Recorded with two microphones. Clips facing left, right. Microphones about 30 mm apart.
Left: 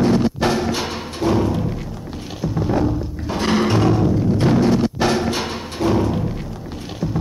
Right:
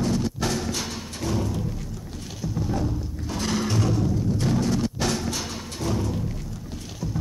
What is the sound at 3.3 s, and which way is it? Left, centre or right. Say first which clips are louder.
Music: left 8 dB; left.